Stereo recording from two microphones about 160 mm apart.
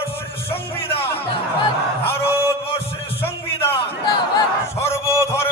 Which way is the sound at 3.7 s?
25° left (ahead or behind).